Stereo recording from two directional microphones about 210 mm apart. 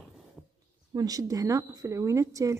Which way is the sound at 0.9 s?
15° right (ahead or behind).